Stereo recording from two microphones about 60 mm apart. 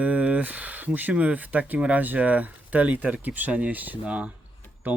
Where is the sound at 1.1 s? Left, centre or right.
Right.